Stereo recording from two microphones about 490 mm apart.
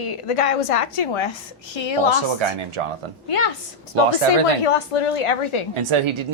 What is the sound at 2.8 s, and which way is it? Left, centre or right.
Speech, right.